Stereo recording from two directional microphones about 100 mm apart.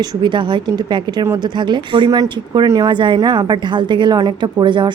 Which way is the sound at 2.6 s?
35° right (ahead or behind).